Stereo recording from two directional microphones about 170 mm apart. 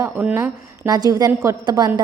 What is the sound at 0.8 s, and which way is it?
A woman's voice, 20° right (ahead or behind).